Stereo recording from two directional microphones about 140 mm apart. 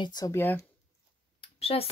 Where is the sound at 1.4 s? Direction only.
45° left (ahead or behind).